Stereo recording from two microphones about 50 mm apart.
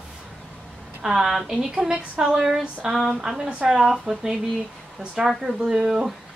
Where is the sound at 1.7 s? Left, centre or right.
Centre.